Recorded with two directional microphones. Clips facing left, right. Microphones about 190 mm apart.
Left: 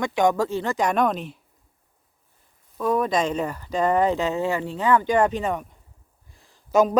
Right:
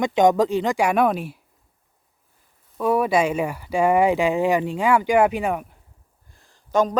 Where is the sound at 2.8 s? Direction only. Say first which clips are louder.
Right 3 dB; 10° right (ahead or behind).